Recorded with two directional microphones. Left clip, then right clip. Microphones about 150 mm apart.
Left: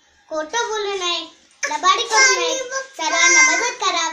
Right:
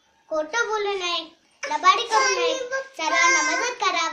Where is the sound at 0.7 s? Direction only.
45° right (ahead or behind).